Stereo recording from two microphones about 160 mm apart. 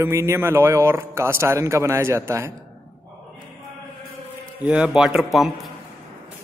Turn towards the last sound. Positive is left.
turn(degrees=0)  # may be behind; listen again after turning